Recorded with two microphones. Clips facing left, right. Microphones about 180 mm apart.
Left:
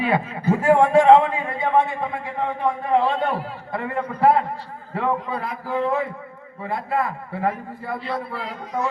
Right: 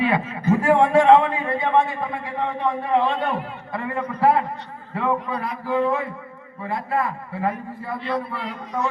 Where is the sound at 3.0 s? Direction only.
35° left (ahead or behind).